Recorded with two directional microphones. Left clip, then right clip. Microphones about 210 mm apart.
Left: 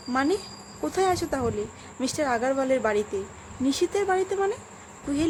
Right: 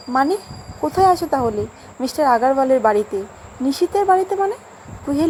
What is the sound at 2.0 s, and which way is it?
Speech, 10° left (ahead or behind).